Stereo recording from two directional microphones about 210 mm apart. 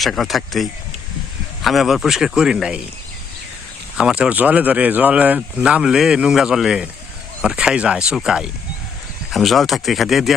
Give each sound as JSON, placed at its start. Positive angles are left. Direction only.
{"t": 0.0, "sound": "speech", "side_deg": 0}
{"t": 3.9, "sound": "speech", "side_deg": -5}